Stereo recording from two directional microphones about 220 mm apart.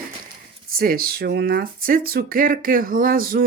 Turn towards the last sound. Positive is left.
turn(degrees=-40)  # may be behind; listen again after turning